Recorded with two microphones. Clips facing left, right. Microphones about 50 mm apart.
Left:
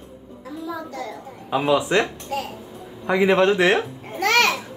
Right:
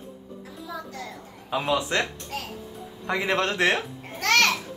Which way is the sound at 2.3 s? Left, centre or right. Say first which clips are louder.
Left 8 dB; centre.